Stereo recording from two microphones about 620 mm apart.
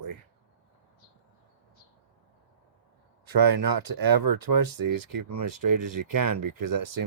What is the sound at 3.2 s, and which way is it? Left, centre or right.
Speech, right.